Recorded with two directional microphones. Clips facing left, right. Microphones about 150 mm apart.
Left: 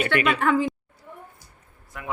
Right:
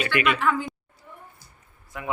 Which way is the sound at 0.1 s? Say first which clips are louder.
Even; 35° left (ahead or behind).